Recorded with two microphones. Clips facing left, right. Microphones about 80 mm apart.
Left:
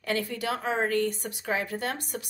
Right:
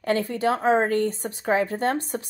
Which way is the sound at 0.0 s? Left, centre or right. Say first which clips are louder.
Right 7 dB; right.